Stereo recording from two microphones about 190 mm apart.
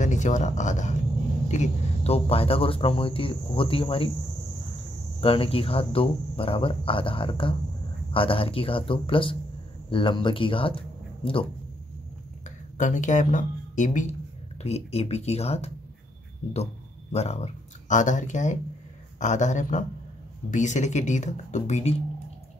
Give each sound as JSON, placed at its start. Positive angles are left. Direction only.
{"t": 0.0, "sound": "speech", "side_deg": 40}
{"t": 5.2, "sound": "speech", "side_deg": 30}
{"t": 12.7, "sound": "speech", "side_deg": 40}
{"t": 17.1, "sound": "speech", "side_deg": 35}